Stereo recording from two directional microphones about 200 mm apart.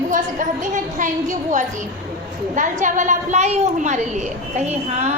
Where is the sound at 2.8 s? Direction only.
40° right (ahead or behind).